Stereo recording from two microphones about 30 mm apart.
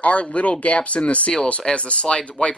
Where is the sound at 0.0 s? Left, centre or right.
Left.